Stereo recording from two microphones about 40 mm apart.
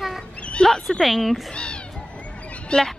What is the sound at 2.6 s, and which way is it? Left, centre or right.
Speech, centre.